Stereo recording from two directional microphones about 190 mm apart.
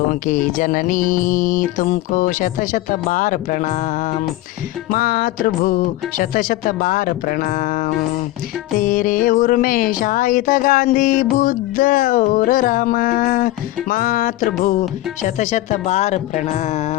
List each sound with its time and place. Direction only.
0.1 s music: 45° left (ahead or behind)
4.9 s music: 50° left (ahead or behind)
13.9 s speech: 45° left (ahead or behind)